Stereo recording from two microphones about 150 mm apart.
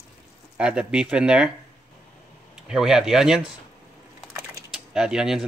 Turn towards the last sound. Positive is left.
turn(degrees=-5)  # may be behind; listen again after turning